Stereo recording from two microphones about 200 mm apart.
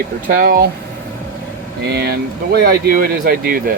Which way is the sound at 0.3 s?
45° right (ahead or behind).